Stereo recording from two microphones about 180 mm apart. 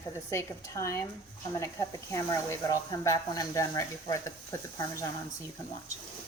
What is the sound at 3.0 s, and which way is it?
Speech, 20° left (ahead or behind).